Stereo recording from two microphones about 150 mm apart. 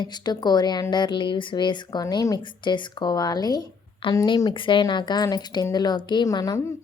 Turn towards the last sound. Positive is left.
turn(degrees=20)  # may be behind; listen again after turning